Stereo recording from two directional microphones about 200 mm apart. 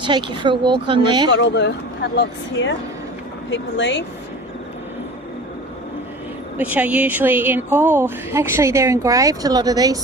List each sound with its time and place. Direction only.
0.0 s speech: 25° right (ahead or behind)
1.3 s speech: 60° left (ahead or behind)
6.6 s a woman's voice: 10° right (ahead or behind)